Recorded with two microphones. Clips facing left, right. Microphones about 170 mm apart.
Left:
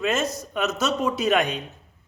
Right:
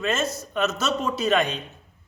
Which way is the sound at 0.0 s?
15° left (ahead or behind).